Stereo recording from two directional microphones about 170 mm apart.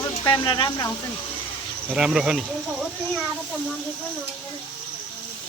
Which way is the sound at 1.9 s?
5° right (ahead or behind).